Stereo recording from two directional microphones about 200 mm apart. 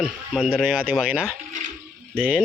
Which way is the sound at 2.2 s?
5° right (ahead or behind).